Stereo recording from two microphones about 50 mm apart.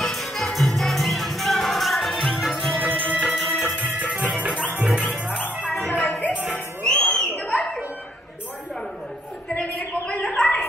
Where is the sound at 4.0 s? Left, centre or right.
Right.